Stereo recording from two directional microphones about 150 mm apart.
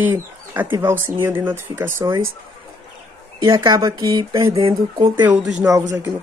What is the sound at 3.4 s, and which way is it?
Speech, 25° right (ahead or behind).